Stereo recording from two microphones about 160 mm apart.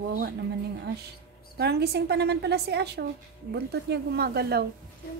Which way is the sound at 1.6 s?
90° right.